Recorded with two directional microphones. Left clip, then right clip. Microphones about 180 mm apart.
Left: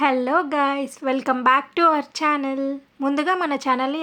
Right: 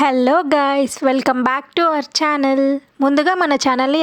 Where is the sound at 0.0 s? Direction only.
65° right (ahead or behind).